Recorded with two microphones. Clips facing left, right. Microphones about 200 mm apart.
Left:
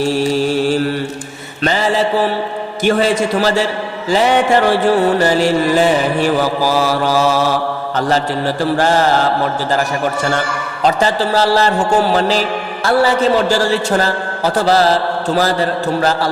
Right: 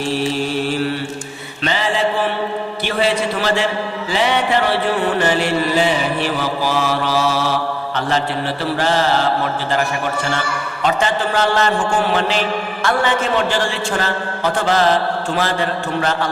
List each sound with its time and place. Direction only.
0.2 s mantra: 40° left (ahead or behind)
2.8 s music: 45° left (ahead or behind)
10.8 s a man's voice: 35° left (ahead or behind)